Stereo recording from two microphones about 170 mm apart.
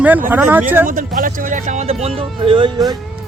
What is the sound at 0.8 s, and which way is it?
Speech, 55° right (ahead or behind).